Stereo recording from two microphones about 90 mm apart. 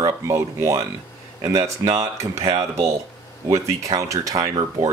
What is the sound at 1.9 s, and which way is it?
Speech, 40° right (ahead or behind).